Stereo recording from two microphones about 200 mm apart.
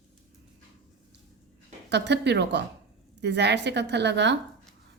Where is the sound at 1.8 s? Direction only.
60° right (ahead or behind).